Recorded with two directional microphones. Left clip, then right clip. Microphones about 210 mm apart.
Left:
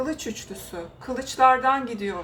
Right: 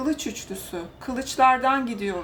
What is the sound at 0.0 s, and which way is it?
Speech, 20° right (ahead or behind).